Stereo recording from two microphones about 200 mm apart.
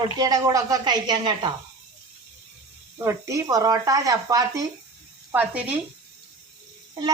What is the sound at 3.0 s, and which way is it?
Speech, 15° right (ahead or behind).